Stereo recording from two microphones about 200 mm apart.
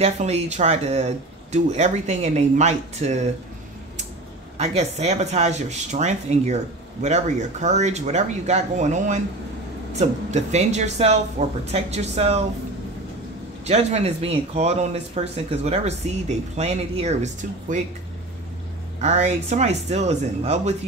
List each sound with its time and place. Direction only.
0.0 s speech: 35° right (ahead or behind)
4.6 s speech: 30° right (ahead or behind)
13.7 s speech: 35° right (ahead or behind)
18.9 s speech: 35° right (ahead or behind)